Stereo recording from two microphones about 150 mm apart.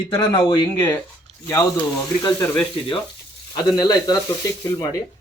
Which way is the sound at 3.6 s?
25° left (ahead or behind).